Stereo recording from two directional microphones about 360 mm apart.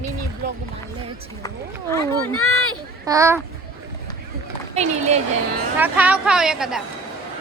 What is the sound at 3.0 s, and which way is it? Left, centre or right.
Speech, centre.